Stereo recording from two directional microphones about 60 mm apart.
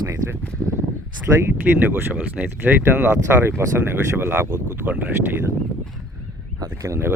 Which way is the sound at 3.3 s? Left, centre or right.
Right.